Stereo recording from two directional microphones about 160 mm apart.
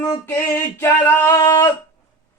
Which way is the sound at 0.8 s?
15° left (ahead or behind).